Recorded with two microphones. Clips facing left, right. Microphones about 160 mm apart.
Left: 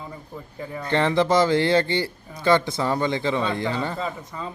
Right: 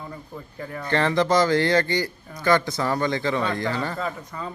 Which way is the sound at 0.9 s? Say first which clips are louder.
Left 1 dB; 20° left (ahead or behind).